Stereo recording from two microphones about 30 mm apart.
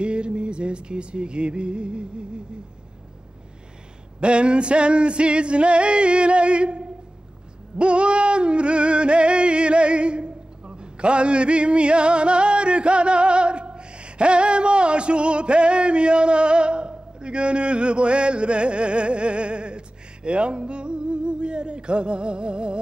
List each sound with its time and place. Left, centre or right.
0.0 s music: right
4.2 s music: right
7.7 s a sound: right
20.2 s speech: right